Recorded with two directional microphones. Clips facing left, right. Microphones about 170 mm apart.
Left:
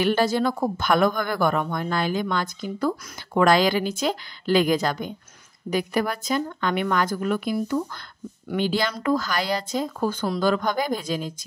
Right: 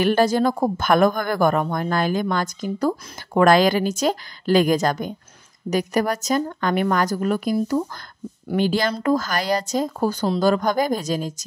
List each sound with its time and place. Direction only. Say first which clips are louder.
0.0 s speech: right 3 dB; 45° right (ahead or behind)